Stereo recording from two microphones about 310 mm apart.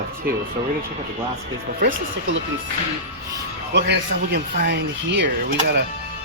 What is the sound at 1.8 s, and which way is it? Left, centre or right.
Speech, right.